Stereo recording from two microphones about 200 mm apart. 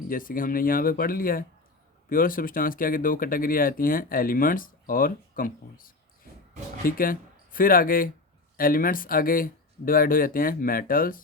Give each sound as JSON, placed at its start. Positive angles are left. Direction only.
{"t": 0.1, "sound": "speech", "side_deg": 45}